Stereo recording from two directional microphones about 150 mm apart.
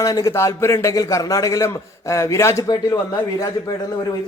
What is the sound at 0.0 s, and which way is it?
A man's voice, 25° left (ahead or behind).